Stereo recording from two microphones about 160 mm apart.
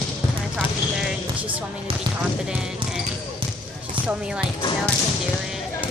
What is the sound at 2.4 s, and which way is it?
Speech, 5° right (ahead or behind).